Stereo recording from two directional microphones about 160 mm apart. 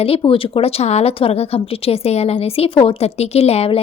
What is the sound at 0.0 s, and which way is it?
A woman's voice, 35° left (ahead or behind).